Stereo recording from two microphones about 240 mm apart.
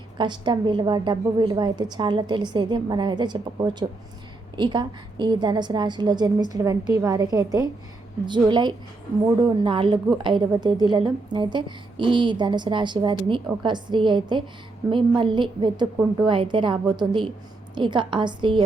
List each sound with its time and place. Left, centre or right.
0.2 s a woman's voice: centre